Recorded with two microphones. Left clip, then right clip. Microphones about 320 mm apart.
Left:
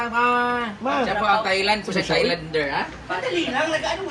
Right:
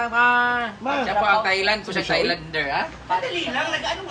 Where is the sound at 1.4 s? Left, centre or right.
Centre.